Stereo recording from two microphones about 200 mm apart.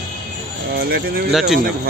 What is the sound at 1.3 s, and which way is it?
Speech, centre (ahead or behind).